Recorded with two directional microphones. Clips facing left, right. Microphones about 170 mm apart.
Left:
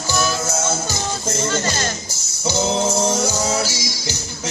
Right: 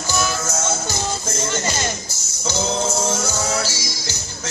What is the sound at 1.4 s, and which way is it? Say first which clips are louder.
Music: left 1 dB; 15° right (ahead or behind).